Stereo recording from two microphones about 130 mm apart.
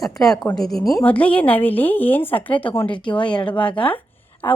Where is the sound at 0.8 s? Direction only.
25° left (ahead or behind).